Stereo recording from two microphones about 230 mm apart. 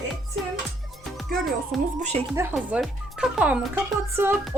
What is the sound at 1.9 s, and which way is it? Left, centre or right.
Speech, right.